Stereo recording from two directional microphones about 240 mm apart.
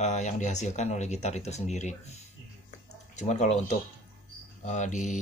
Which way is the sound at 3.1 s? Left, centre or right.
Left.